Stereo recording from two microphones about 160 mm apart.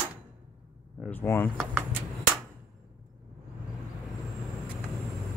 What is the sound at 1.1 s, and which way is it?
Speech, 15° left (ahead or behind).